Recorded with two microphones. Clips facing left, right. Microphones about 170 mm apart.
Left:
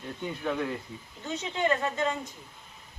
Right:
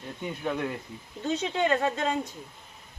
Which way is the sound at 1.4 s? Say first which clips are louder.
Right 1 dB; 65° right (ahead or behind).